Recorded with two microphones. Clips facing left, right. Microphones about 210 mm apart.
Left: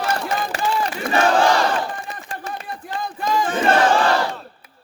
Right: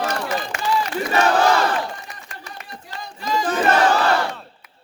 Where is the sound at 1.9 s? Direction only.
50° left (ahead or behind).